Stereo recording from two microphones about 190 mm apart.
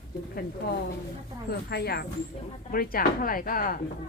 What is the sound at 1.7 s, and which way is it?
Speech, 55° left (ahead or behind).